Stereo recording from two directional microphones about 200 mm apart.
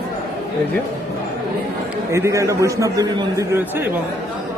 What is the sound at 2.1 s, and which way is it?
A man's voice, 15° right (ahead or behind).